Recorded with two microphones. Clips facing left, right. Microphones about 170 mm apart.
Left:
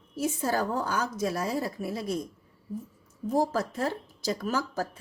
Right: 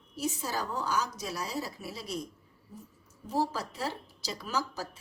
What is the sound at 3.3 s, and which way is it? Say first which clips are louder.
A woman's voice: left 5 dB; 50° left (ahead or behind).